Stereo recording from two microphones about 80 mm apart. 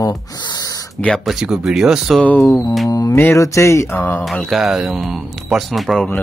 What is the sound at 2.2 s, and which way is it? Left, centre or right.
Speech, centre.